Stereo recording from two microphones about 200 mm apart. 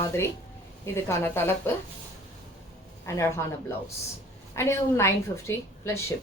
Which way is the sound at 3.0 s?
15° left (ahead or behind).